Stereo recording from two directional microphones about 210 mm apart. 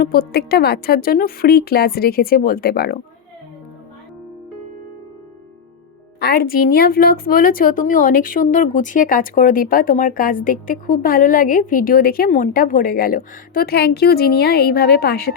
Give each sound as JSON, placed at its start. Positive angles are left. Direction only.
{"t": 0.0, "sound": "a woman's voice", "side_deg": 45}
{"t": 6.1, "sound": "a woman's voice", "side_deg": 45}